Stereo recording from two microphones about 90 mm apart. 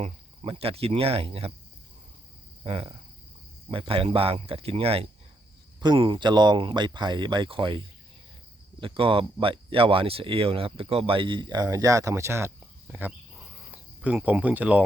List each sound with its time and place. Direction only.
0.4 s speech: 90° right
2.6 s speech: 90° right
6.0 s speech: 60° right (ahead or behind)
8.8 s speech: 90° right; by 12.5 s 30° right (ahead or behind)
12.9 s a sound: 15° right (ahead or behind)